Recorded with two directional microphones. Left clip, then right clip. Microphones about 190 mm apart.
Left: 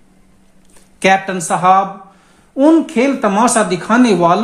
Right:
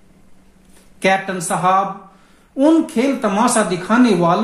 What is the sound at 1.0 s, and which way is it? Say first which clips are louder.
Speech: left 4 dB; 35° left (ahead or behind).